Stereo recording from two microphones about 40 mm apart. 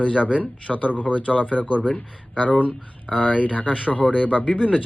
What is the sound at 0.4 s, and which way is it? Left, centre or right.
Speech, left.